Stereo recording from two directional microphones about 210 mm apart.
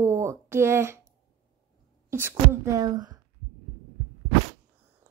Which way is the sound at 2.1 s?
10° right (ahead or behind).